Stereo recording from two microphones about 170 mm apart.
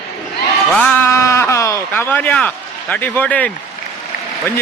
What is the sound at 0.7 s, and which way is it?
Speech, 10° left (ahead or behind).